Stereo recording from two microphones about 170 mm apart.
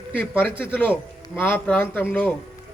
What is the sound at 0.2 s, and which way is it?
Speech, 10° left (ahead or behind).